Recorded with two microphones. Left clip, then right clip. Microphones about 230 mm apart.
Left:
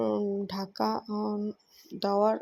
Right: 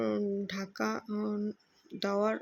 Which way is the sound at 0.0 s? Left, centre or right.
Centre.